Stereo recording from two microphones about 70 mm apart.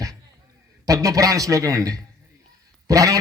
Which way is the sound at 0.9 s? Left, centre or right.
Right.